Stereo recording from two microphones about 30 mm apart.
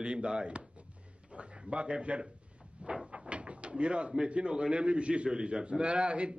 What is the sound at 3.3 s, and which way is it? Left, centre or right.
Speech, right.